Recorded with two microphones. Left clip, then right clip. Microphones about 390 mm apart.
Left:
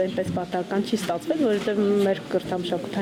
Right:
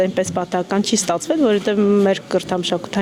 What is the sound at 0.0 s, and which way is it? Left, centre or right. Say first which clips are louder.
Speech: right 7 dB; right.